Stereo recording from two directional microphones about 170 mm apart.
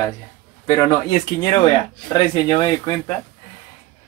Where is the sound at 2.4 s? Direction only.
20° left (ahead or behind).